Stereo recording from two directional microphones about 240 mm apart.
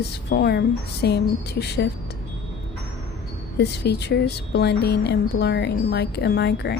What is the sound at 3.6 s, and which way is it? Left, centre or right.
A woman's voice, left.